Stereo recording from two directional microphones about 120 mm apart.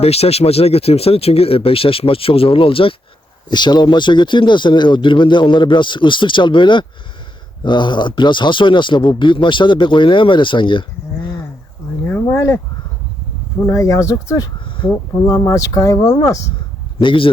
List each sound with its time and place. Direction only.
0.0 s speech: 60° left (ahead or behind)
3.5 s speech: 40° left (ahead or behind)
12.0 s speech: 20° left (ahead or behind)
13.7 s speech: 25° left (ahead or behind)
17.0 s speech: 45° left (ahead or behind)